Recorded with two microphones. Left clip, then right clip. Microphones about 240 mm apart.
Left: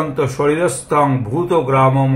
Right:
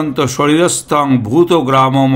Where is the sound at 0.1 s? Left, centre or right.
Right.